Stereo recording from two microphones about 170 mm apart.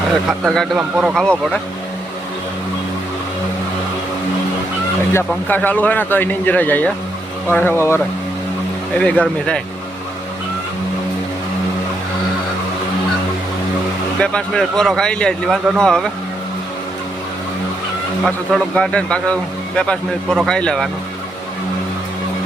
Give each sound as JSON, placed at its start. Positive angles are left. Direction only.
{"t": 0.3, "sound": "a man's voice", "side_deg": 0}
{"t": 0.8, "sound": "a man's voice", "side_deg": -10}
{"t": 1.1, "sound": "a man's voice", "side_deg": 5}
{"t": 5.1, "sound": "speech", "side_deg": 10}
{"t": 9.0, "sound": "speech", "side_deg": 10}
{"t": 14.2, "sound": "a man's voice", "side_deg": 5}
{"t": 18.2, "sound": "a man's voice", "side_deg": 5}